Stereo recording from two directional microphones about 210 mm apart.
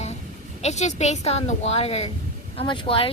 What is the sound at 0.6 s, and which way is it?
A woman's voice, 30° left (ahead or behind).